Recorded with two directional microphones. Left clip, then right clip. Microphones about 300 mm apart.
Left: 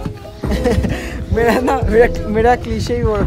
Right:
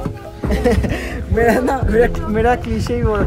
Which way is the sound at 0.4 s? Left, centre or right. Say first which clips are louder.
Right 1 dB; centre.